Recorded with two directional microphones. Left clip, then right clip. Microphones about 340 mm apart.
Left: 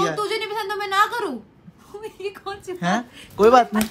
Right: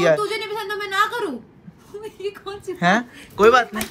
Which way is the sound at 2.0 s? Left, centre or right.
Centre.